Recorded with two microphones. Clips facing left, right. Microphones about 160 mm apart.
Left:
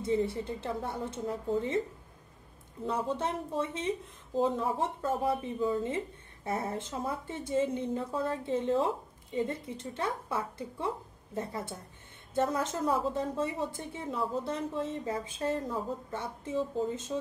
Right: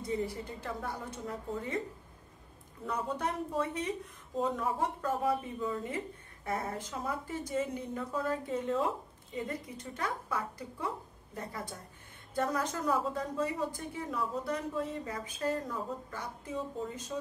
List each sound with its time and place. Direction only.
0.0 s a woman's voice: 25° left (ahead or behind)
2.8 s a woman's voice: 25° left (ahead or behind)